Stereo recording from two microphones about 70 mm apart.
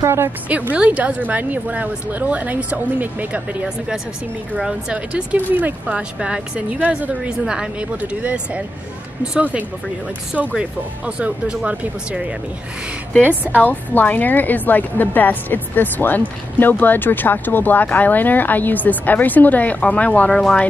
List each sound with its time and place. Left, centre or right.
0.0 s a woman's voice: right
0.5 s a woman's voice: centre
13.6 s a woman's voice: left
20.2 s speech: centre